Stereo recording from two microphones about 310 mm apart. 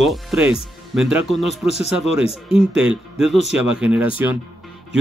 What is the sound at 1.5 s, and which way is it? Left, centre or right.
Speech, centre.